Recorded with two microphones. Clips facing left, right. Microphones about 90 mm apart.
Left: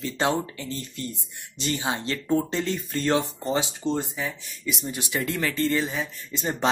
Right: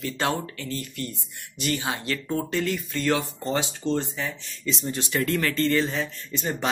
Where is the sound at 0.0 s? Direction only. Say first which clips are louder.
Left 2 dB; 20° left (ahead or behind).